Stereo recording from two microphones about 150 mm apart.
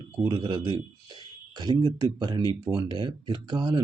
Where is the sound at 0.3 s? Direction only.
30° right (ahead or behind).